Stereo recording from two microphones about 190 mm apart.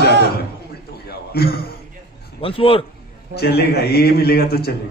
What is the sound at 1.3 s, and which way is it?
Speech, 55° left (ahead or behind).